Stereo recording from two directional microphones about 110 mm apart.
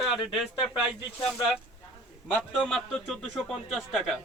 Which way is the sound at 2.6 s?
5° left (ahead or behind).